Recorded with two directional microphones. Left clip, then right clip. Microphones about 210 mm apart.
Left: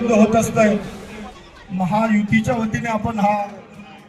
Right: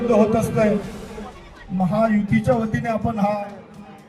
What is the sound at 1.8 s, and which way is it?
A man's voice, 50° right (ahead or behind).